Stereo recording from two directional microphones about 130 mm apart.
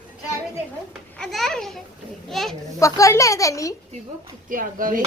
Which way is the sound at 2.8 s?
25° left (ahead or behind).